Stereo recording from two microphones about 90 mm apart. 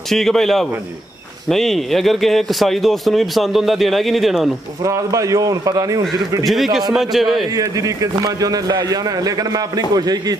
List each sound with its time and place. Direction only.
0.1 s speech: 5° left (ahead or behind)
4.8 s a man's voice: 35° right (ahead or behind)
6.4 s speech: centre (ahead or behind)
7.5 s a man's voice: 40° right (ahead or behind)